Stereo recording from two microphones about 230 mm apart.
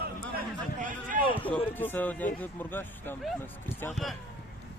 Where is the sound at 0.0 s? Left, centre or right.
Right.